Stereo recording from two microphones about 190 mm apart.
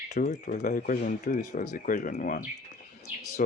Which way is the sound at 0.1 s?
40° left (ahead or behind).